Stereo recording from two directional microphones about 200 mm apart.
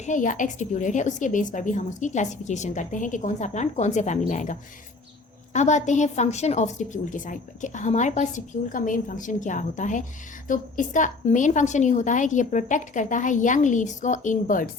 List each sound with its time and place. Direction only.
0.0 s a woman's voice: 40° left (ahead or behind)
5.5 s a woman's voice: 35° left (ahead or behind)